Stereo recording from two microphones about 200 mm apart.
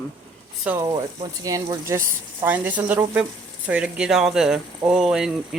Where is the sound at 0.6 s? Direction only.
15° right (ahead or behind).